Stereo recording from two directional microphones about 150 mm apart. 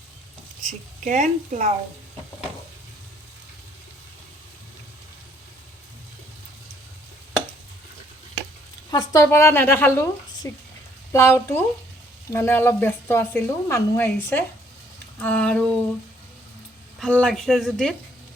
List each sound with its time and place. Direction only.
1.0 s a woman's voice: 55° right (ahead or behind)
8.9 s speech: 25° left (ahead or behind)
11.1 s speech: 20° left (ahead or behind)
17.0 s speech: 5° left (ahead or behind)